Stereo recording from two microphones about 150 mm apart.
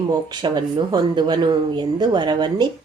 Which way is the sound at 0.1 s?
30° right (ahead or behind).